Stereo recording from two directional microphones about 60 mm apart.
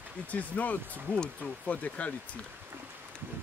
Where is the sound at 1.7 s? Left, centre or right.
Left.